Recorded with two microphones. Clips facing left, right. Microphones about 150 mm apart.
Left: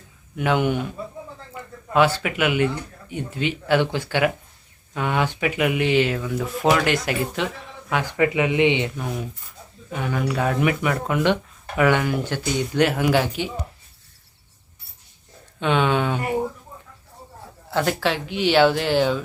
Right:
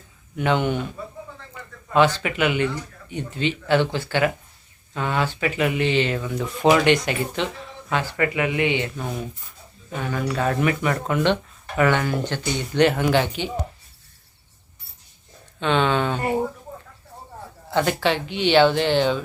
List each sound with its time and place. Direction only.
0.3 s speech: 5° left (ahead or behind)
1.9 s speech: 10° left (ahead or behind)
9.0 s speech: 5° left (ahead or behind)
15.6 s a sound: 10° left (ahead or behind)
17.7 s speech: centre (ahead or behind)